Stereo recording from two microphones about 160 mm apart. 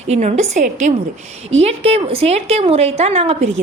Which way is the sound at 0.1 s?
45° right (ahead or behind).